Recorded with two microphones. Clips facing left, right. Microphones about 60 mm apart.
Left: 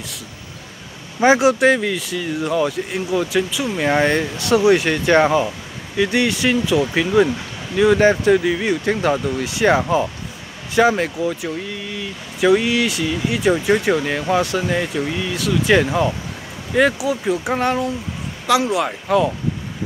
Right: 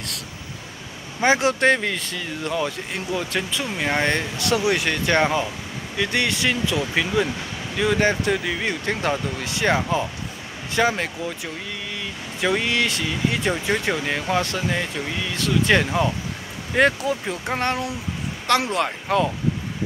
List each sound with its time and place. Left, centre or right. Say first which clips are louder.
1.2 s speech: left 5 dB; centre
1.8 s speech: left 4 dB; centre
4.4 s speech: left 9 dB; left
7.7 s speech: left 7 dB; centre
9.4 s speech: left 5 dB; left; by 14.3 s centre
14.3 s speech: left 5 dB; centre
14.7 s speech: left 5 dB; centre